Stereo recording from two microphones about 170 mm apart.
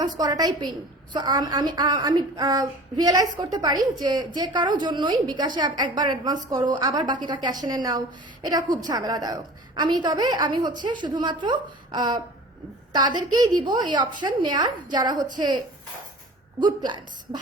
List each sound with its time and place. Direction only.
0.0 s a woman's voice: 25° right (ahead or behind)